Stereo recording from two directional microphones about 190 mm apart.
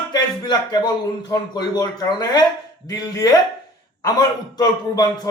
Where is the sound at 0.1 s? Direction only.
20° left (ahead or behind).